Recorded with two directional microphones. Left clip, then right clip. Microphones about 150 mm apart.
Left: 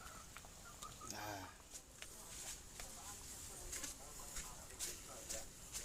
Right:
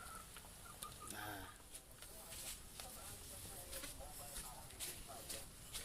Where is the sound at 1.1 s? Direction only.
40° left (ahead or behind).